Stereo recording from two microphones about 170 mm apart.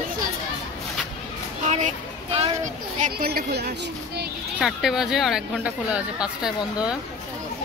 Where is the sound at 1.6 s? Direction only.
40° right (ahead or behind).